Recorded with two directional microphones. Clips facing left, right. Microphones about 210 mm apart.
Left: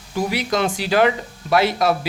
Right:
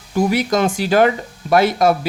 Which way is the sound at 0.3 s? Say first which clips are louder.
Right 3 dB; 45° right (ahead or behind).